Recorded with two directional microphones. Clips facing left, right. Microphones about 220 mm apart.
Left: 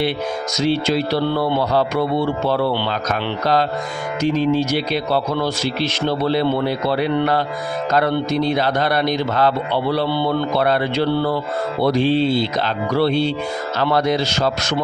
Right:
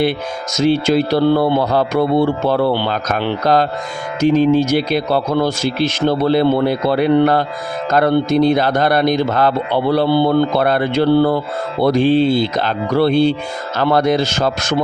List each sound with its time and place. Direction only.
0.5 s speech: 50° right (ahead or behind)